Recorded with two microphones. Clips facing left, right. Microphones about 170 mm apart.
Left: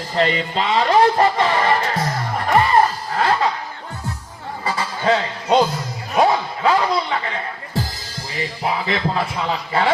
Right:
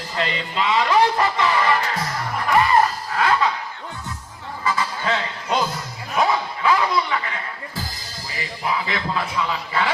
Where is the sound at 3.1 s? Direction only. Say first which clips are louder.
Left 1 dB; 35° left (ahead or behind).